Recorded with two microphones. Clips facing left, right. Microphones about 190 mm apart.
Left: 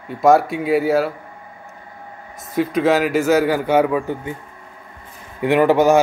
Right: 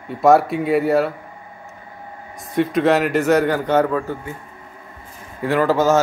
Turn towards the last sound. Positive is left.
turn(degrees=15)  # may be behind; listen again after turning